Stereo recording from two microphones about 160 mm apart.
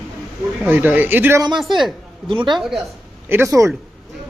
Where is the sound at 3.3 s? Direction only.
15° right (ahead or behind).